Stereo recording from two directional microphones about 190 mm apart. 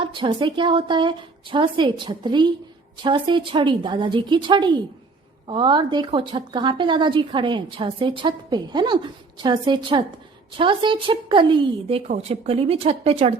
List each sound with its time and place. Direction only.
0.0 s speech: 25° right (ahead or behind)